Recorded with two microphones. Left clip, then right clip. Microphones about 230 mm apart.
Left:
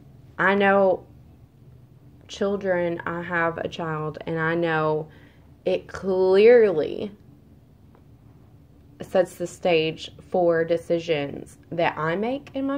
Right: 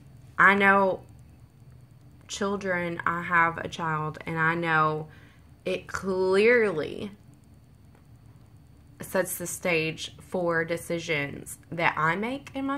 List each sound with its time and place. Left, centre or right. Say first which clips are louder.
0.4 s a woman's voice: even; right
2.2 s a woman's voice: left 5 dB; right
8.9 s a woman's voice: left 6 dB; right